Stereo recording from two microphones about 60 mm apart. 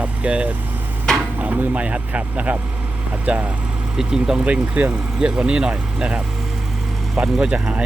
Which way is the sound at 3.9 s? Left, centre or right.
Centre.